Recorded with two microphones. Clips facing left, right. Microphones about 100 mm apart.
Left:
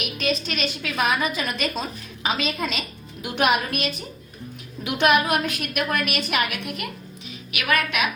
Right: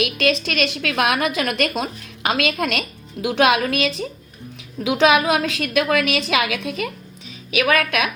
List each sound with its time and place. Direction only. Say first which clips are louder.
0.2 s a woman's voice: right 2 dB; 85° right